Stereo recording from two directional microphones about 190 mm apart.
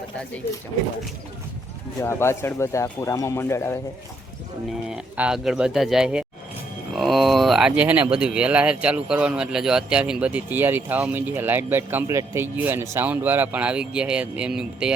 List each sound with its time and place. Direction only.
2.0 s speech: 15° left (ahead or behind)
4.9 s speech: 5° right (ahead or behind)